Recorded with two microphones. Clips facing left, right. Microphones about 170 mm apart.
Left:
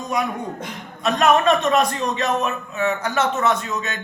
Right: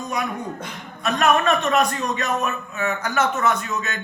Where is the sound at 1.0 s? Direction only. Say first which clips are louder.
Left 2 dB; 25° left (ahead or behind).